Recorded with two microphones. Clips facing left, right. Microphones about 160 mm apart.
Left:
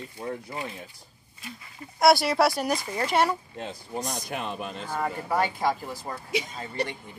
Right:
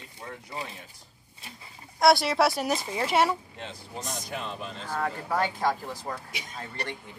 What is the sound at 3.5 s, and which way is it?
Speech, 45° left (ahead or behind).